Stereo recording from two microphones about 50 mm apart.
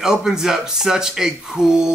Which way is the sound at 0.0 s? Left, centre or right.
Centre.